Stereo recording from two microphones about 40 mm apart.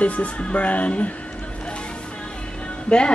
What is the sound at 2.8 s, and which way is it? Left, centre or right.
Speech, left.